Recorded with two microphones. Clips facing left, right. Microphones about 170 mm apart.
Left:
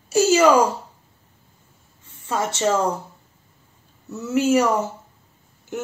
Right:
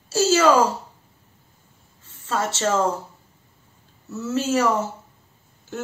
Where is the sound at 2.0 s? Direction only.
15° left (ahead or behind).